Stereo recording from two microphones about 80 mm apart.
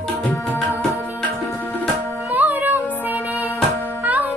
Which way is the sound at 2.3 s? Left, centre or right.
Right.